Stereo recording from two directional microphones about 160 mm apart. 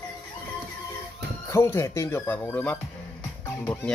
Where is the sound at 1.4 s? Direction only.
15° left (ahead or behind).